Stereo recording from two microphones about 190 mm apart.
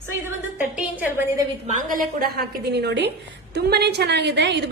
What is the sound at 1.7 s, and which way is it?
A woman's voice, 45° right (ahead or behind).